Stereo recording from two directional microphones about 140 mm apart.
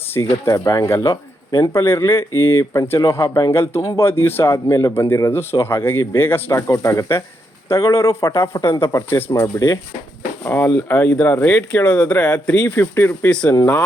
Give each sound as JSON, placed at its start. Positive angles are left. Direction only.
{"t": 0.4, "sound": "speech", "side_deg": 25}
{"t": 10.4, "sound": "speech", "side_deg": 15}